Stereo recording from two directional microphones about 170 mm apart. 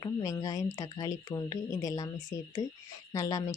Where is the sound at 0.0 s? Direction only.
20° left (ahead or behind).